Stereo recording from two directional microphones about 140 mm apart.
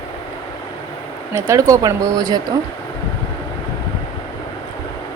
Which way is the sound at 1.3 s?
20° right (ahead or behind).